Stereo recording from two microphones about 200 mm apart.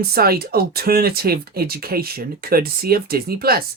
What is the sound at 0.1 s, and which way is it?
Speech, 50° right (ahead or behind).